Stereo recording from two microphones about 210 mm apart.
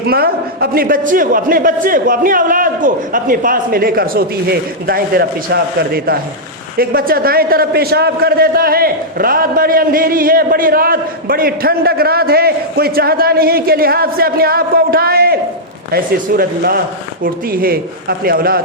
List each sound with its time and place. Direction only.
0.1 s a man's voice: 45° right (ahead or behind)